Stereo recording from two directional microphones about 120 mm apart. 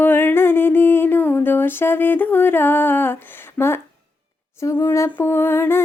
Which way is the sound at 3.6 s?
10° left (ahead or behind).